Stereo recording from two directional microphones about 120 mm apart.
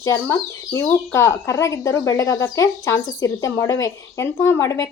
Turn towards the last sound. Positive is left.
turn(degrees=25)  # may be behind; listen again after turning